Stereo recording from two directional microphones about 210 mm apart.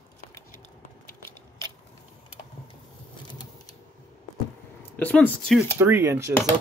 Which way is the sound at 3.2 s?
20° left (ahead or behind).